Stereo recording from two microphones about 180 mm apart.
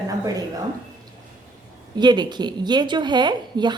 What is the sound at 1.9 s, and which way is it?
A woman's voice, 25° right (ahead or behind).